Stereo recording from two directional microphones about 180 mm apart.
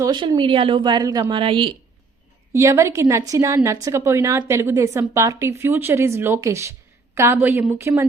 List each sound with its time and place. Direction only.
0.0 s a woman's voice: 25° right (ahead or behind)
2.5 s a woman's voice: 15° right (ahead or behind)